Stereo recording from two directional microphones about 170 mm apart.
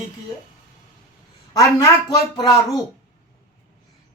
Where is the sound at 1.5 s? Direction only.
20° left (ahead or behind).